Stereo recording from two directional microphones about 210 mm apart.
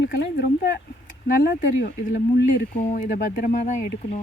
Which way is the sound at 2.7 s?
35° left (ahead or behind).